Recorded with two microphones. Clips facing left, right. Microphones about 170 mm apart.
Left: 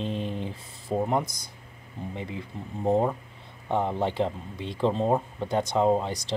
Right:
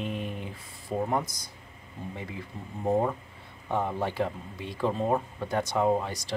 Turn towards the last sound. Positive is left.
turn(degrees=20)  # may be behind; listen again after turning